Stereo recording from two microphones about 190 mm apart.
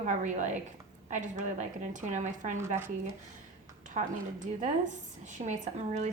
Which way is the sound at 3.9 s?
40° right (ahead or behind).